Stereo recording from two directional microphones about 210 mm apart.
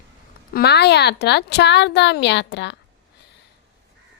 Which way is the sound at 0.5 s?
50° left (ahead or behind).